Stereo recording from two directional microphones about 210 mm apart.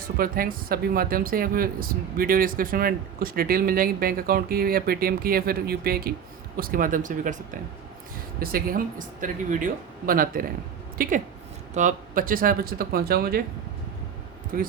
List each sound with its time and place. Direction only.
0.2 s speech: 45° right (ahead or behind)
8.4 s a woman's voice: 45° right (ahead or behind)
14.5 s speech: 45° right (ahead or behind)